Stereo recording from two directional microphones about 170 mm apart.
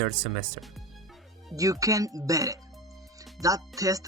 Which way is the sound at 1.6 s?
20° right (ahead or behind).